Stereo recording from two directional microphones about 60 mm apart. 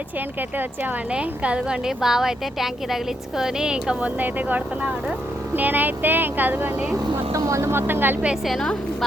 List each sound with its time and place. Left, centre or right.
1.1 s a woman's voice: centre
4.2 s speech: right
7.3 s speech: right
7.6 s speech: right
8.4 s a woman's voice: centre